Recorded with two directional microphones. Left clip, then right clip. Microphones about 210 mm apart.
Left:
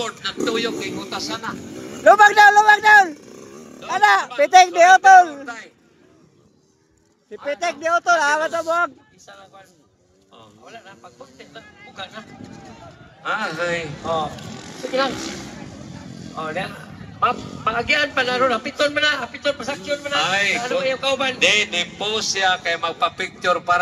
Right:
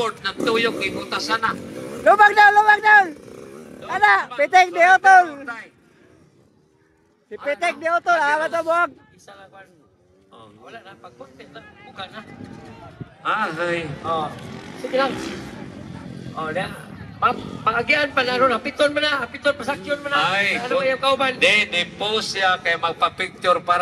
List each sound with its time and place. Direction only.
0.0 s speech: 20° right (ahead or behind); by 2.0 s 5° right (ahead or behind)
2.0 s a man's voice: 15° left (ahead or behind)
3.3 s a sound: 5° left (ahead or behind)
4.4 s a man's voice: 15° left (ahead or behind)
5.3 s speech: 45° left (ahead or behind)
7.4 s a man's voice: centre (ahead or behind)
8.5 s speech: centre (ahead or behind)
10.6 s a man's voice: 5° left (ahead or behind); by 14.3 s 20° left (ahead or behind)
14.5 s vehicle: 50° left (ahead or behind)
15.0 s speech: 35° left (ahead or behind)
16.1 s vehicle: 25° left (ahead or behind)
16.3 s speech: centre (ahead or behind)
17.4 s a man's voice: 15° left (ahead or behind)
17.6 s speech: centre (ahead or behind)